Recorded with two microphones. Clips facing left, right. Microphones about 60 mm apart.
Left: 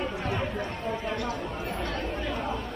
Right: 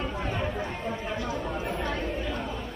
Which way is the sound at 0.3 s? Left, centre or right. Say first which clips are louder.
Even; centre.